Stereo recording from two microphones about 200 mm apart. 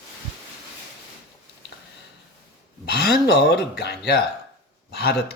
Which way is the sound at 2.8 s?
55° left (ahead or behind).